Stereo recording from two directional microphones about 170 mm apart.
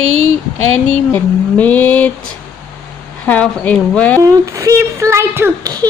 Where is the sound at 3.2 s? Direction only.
10° left (ahead or behind).